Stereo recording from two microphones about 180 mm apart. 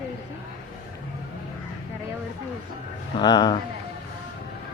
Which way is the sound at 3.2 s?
25° left (ahead or behind).